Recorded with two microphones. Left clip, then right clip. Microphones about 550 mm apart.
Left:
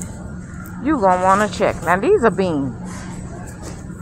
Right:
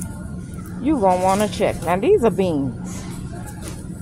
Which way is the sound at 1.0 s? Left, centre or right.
Right.